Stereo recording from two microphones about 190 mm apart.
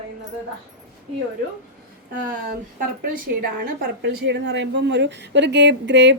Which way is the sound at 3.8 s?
65° right (ahead or behind).